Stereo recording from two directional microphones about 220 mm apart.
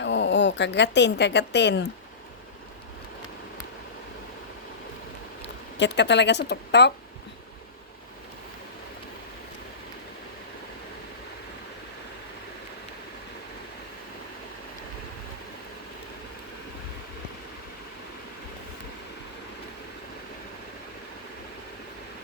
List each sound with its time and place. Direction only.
0.0 s speech: 55° left (ahead or behind)
5.7 s speech: 50° left (ahead or behind)